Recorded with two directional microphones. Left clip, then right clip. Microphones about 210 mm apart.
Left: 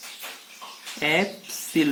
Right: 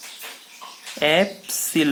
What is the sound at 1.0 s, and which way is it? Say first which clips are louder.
Speech: right 5 dB; 40° right (ahead or behind).